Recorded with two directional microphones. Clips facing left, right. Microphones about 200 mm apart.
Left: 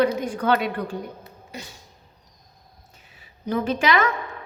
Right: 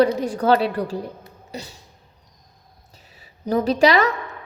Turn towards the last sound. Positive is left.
turn(degrees=-35)  # may be behind; listen again after turning